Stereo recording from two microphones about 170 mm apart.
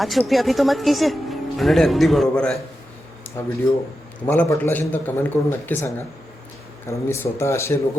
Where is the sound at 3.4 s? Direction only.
15° left (ahead or behind).